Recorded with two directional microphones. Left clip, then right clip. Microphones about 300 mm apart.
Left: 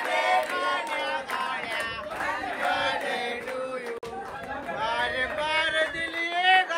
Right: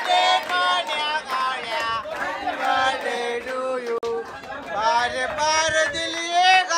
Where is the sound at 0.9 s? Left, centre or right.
Centre.